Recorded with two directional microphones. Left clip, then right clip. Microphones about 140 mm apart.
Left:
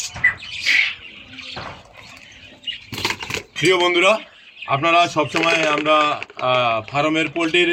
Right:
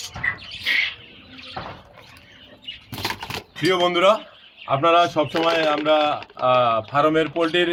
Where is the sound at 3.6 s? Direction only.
30° right (ahead or behind).